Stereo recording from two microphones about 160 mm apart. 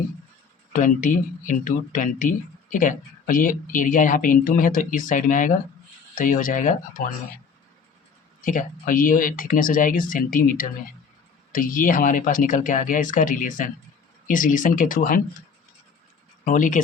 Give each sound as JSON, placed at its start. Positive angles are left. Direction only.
{"t": 0.7, "sound": "speech", "side_deg": 55}
{"t": 8.4, "sound": "speech", "side_deg": 55}
{"t": 16.4, "sound": "speech", "side_deg": 55}